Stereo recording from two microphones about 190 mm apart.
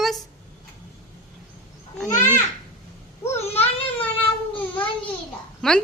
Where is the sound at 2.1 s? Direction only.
40° left (ahead or behind).